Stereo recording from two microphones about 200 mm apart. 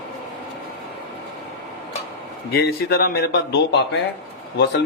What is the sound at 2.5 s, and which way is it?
Speech, 50° left (ahead or behind).